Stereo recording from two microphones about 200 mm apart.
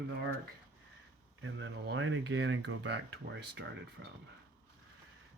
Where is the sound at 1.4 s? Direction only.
75° right (ahead or behind).